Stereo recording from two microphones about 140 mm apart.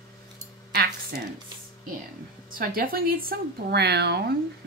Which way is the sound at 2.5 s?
90° right.